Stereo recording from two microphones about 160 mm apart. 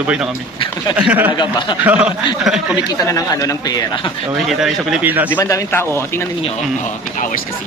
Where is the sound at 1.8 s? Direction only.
10° right (ahead or behind).